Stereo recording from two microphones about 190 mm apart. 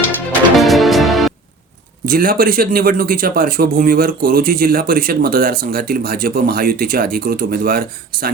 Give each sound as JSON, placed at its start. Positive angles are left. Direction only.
{"t": 0.6, "sound": "music", "side_deg": 0}
{"t": 2.0, "sound": "speech", "side_deg": -50}